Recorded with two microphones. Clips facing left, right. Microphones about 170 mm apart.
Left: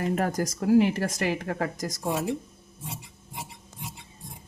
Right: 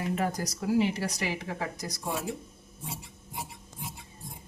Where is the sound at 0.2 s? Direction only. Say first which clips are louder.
Left 4 dB; 45° left (ahead or behind).